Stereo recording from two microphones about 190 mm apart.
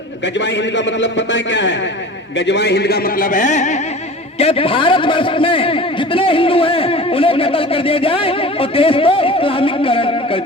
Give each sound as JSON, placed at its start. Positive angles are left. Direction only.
{"t": 1.0, "sound": "a man's voice", "side_deg": 70}